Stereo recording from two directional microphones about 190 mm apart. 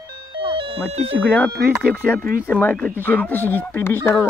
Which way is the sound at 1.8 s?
10° right (ahead or behind).